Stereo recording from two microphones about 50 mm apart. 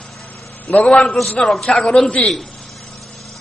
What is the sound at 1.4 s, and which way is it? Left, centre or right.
Speech, centre.